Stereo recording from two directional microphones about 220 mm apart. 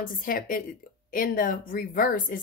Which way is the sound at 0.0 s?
40° left (ahead or behind).